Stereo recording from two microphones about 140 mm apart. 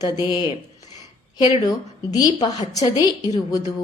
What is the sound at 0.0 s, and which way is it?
Speech, 30° left (ahead or behind).